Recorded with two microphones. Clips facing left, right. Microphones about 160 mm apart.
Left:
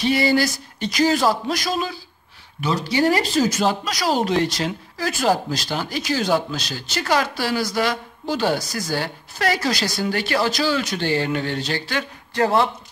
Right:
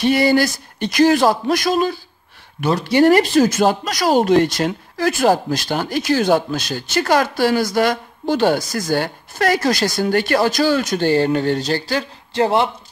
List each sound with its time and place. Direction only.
0.0 s speech: 55° right (ahead or behind)
12.4 s speech: 25° right (ahead or behind)